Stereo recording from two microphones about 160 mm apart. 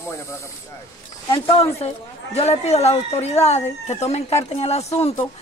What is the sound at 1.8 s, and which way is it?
A woman's voice, 40° left (ahead or behind).